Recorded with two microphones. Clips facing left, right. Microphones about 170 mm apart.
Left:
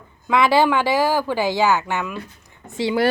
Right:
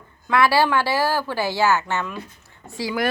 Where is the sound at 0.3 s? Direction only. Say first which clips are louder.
Left 2 dB; 20° left (ahead or behind).